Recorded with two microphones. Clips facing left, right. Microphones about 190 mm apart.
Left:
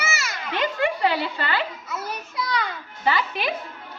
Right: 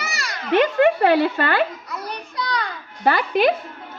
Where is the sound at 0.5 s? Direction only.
65° right (ahead or behind); by 1.6 s 50° right (ahead or behind).